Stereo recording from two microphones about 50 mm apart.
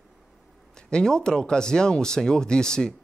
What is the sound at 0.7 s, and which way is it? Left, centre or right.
Speech, centre.